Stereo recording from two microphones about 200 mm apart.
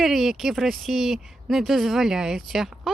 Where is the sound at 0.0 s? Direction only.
Centre (ahead or behind).